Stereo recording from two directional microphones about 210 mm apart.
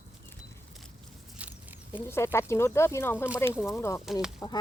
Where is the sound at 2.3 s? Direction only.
10° left (ahead or behind).